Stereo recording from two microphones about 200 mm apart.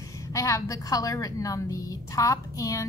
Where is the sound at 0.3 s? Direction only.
15° left (ahead or behind).